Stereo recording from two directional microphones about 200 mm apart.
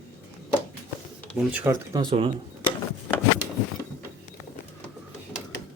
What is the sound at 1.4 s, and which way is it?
Speech, 5° right (ahead or behind).